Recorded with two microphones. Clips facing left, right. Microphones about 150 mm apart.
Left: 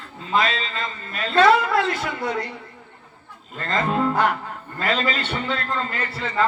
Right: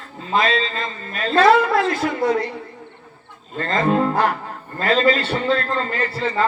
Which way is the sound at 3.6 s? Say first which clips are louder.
Right 4 dB; 30° right (ahead or behind).